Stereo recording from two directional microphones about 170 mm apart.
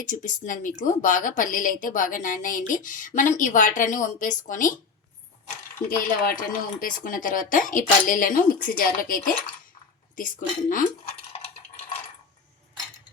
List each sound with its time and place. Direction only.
0.0 s a woman's voice: 50° left (ahead or behind)
6.3 s a woman's voice: 55° left (ahead or behind)